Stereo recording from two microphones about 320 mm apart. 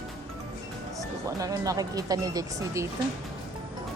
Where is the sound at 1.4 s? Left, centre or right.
Centre.